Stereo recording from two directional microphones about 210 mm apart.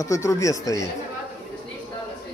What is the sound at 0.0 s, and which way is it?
Speech, 15° left (ahead or behind).